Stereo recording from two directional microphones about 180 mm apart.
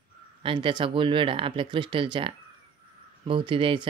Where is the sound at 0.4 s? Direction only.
30° right (ahead or behind).